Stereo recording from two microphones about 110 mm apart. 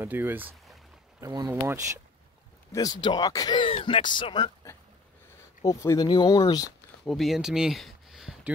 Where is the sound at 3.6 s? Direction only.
50° left (ahead or behind).